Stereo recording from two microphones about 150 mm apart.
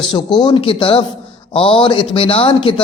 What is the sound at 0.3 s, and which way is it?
Speech, 30° left (ahead or behind).